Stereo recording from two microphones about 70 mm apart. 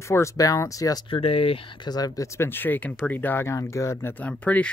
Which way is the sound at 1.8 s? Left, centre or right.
Left.